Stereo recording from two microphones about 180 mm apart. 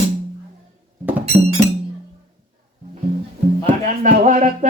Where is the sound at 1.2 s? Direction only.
35° right (ahead or behind).